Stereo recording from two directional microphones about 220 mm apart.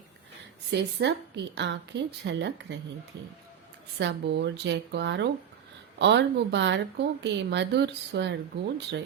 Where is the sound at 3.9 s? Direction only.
50° right (ahead or behind).